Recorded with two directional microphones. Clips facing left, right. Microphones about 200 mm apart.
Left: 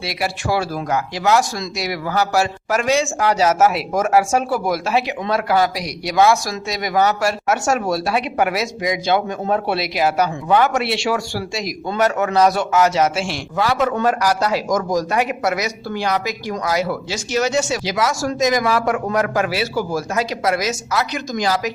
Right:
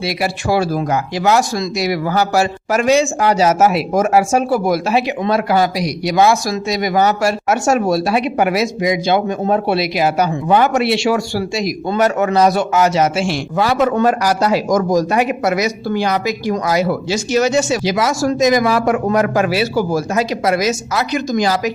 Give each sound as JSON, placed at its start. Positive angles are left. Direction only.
{"t": 0.2, "sound": "speech", "side_deg": -20}
{"t": 16.6, "sound": "speech", "side_deg": -25}